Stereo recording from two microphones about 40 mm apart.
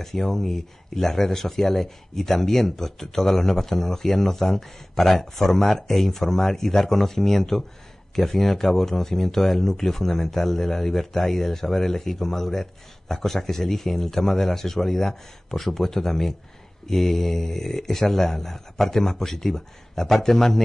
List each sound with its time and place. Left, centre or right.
0.0 s speech: centre